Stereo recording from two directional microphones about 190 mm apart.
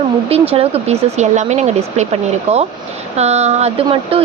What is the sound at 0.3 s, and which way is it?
Speech, 30° right (ahead or behind).